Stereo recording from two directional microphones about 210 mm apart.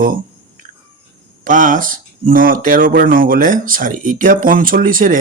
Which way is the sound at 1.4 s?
40° right (ahead or behind).